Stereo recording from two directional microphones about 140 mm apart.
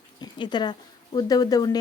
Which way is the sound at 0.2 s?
30° left (ahead or behind).